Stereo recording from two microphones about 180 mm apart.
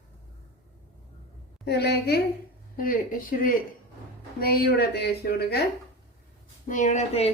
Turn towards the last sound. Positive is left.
turn(degrees=35)  # may be behind; listen again after turning